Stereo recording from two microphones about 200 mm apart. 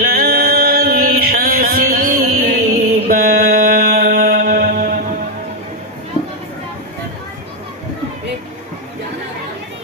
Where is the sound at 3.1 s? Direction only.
45° right (ahead or behind).